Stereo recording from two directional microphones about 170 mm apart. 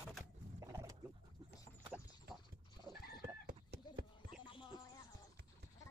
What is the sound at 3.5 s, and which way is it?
Clip-clop, 65° right (ahead or behind).